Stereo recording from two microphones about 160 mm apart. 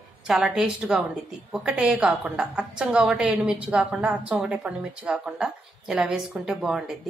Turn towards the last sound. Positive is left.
turn(degrees=-5)  # may be behind; listen again after turning